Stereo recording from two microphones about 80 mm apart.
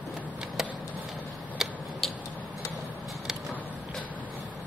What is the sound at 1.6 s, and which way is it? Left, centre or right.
Tick-tock, centre.